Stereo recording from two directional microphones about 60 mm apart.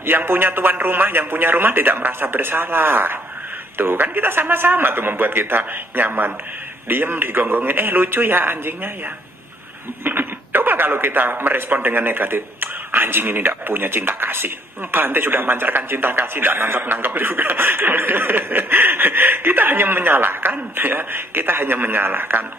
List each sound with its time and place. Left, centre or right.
0.0 s speech: right
10.0 s speech: right